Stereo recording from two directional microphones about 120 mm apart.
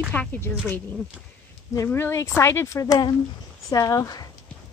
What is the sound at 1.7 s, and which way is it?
A woman's voice, 20° left (ahead or behind).